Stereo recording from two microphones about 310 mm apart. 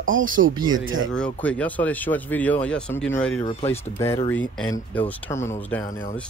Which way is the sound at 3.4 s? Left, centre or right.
Centre.